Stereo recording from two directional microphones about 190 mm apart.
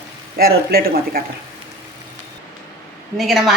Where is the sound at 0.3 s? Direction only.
55° right (ahead or behind).